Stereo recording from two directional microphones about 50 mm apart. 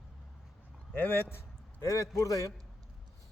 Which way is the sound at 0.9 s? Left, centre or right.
Left.